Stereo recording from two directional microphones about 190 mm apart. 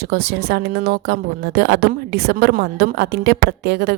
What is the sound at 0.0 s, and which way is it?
A woman's voice, 55° right (ahead or behind).